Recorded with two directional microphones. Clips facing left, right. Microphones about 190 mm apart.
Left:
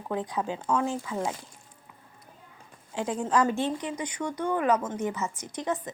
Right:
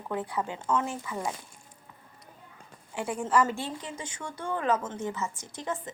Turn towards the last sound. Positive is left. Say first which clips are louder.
# left 4 dB
turn(degrees=20)  # may be behind; listen again after turning